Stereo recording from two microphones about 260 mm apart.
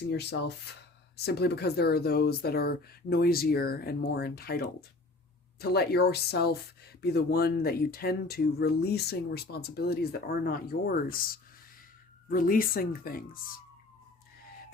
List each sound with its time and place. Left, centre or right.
0.1 s speech: left
12.3 s speech: left